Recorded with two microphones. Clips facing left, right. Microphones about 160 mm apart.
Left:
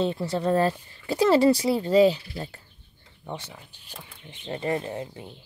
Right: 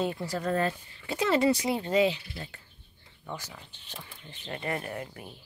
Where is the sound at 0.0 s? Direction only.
25° left (ahead or behind).